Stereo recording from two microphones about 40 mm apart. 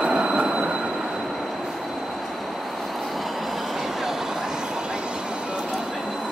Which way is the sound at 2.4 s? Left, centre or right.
Centre.